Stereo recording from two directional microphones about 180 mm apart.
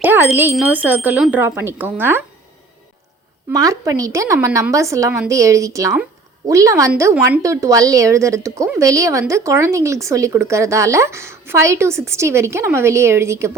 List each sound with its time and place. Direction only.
0.0 s smoke detector: 10° right (ahead or behind)
0.5 s a woman's voice: 10° right (ahead or behind)
3.5 s a woman's voice: 20° right (ahead or behind)